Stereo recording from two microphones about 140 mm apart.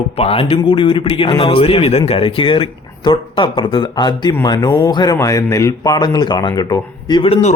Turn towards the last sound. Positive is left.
turn(degrees=35)  # may be behind; listen again after turning